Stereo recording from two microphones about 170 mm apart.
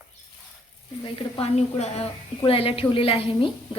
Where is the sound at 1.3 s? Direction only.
40° left (ahead or behind).